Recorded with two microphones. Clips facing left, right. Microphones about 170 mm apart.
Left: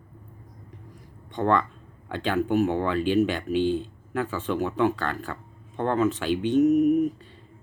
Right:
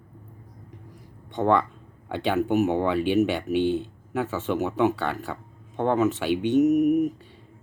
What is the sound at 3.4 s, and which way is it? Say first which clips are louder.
Speech: right 1 dB; 65° right (ahead or behind).